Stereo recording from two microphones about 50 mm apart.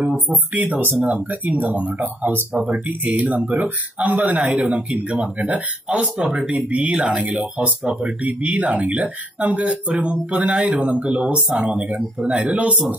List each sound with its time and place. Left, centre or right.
0.6 s speech: right
6.2 s speech: centre